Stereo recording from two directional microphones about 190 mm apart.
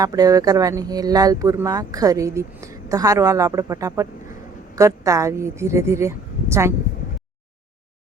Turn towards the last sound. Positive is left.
turn(degrees=-15)  # may be behind; listen again after turning